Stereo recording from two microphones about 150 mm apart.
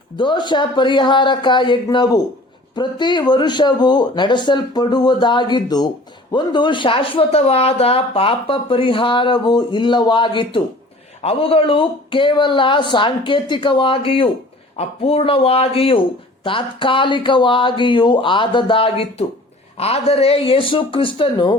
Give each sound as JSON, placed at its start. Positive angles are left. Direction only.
{"t": 0.2, "sound": "speech", "side_deg": 30}